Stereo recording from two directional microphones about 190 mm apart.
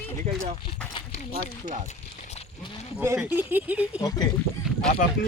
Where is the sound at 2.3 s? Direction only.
30° left (ahead or behind).